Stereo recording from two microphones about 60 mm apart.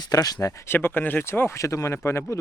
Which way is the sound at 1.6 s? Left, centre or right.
Left.